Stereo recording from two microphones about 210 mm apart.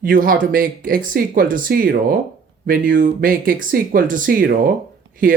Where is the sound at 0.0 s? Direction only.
40° right (ahead or behind).